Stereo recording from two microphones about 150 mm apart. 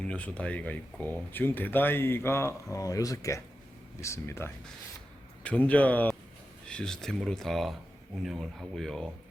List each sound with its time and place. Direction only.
0.0 s speech: 10° left (ahead or behind)